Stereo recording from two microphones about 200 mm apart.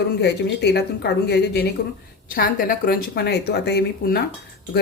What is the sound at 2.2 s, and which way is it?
A woman's voice, 45° left (ahead or behind).